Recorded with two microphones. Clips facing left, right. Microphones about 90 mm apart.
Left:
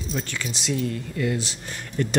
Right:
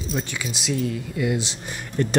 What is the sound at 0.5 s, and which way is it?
Speech, centre (ahead or behind).